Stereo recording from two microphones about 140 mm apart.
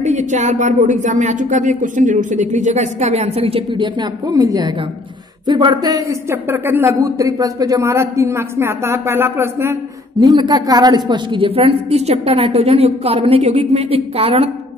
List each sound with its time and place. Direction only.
0.0 s a woman's voice: 55° right (ahead or behind); by 9.8 s 20° right (ahead or behind)
10.2 s a woman's voice: 30° right (ahead or behind); by 14.5 s 45° right (ahead or behind)